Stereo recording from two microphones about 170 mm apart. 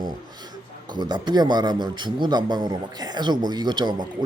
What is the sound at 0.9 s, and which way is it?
Speech, 25° right (ahead or behind).